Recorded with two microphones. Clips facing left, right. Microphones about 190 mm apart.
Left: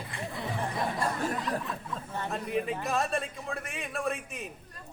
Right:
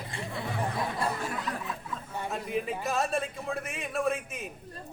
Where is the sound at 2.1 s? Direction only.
5° right (ahead or behind).